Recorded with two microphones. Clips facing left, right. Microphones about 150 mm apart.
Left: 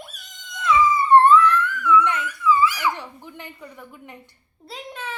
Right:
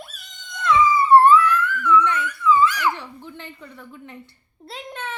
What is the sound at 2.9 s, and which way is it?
Speech, 15° left (ahead or behind).